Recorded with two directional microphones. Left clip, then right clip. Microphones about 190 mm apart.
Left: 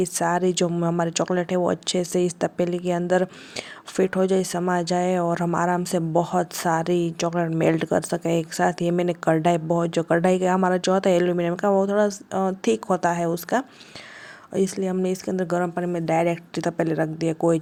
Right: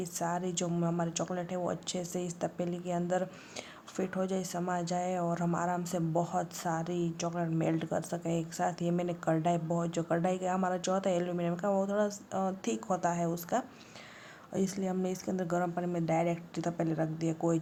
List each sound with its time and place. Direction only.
0.0 s speech: 35° left (ahead or behind)